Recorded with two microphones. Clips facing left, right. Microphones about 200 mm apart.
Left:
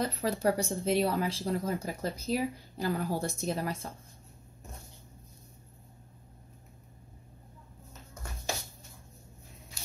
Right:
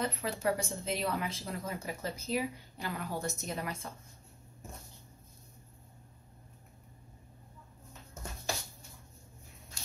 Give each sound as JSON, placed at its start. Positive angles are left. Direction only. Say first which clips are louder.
{"t": 0.0, "sound": "speech", "louder": "left 4 dB", "side_deg": 35}